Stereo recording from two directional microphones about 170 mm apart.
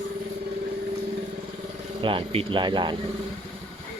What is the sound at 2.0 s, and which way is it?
Speech, 30° right (ahead or behind).